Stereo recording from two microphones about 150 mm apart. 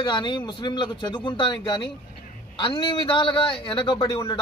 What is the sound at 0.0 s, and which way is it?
Speech, 30° left (ahead or behind).